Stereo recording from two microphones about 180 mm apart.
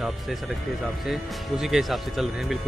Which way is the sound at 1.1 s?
Centre (ahead or behind).